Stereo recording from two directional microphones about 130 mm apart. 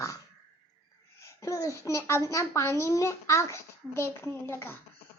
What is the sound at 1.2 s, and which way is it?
A child's voice, 25° left (ahead or behind).